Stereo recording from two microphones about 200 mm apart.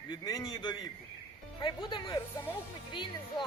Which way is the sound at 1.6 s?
25° left (ahead or behind).